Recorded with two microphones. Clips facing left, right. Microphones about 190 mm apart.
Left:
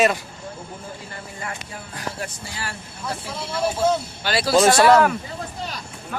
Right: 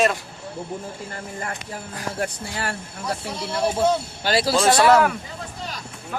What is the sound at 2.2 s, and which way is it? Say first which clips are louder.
Speech: right 5 dB; 55° right (ahead or behind).